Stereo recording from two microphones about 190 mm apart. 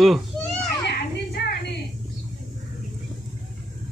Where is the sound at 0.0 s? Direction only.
Centre (ahead or behind).